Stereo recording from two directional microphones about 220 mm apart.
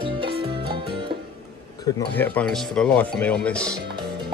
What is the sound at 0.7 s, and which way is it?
Music, 20° right (ahead or behind).